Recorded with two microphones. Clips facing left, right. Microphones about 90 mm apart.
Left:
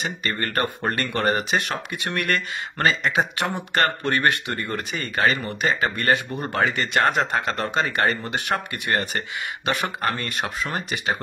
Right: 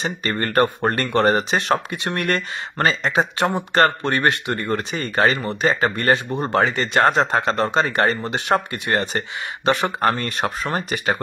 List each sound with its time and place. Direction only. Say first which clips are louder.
0.0 s speech: right 3 dB; 35° right (ahead or behind)